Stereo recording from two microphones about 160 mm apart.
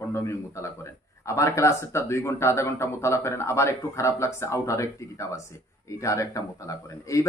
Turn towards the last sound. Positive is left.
turn(degrees=20)  # may be behind; listen again after turning